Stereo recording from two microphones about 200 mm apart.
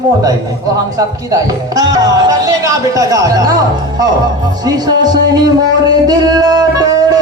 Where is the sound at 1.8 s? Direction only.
20° right (ahead or behind).